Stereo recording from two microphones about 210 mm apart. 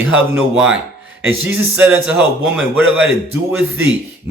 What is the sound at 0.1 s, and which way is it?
Speech, 5° right (ahead or behind).